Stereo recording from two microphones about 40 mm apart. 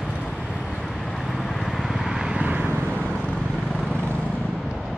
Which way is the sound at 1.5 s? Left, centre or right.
Centre.